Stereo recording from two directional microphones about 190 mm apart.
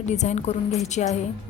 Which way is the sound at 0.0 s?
40° left (ahead or behind).